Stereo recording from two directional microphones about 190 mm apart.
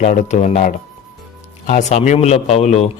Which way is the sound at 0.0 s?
40° left (ahead or behind).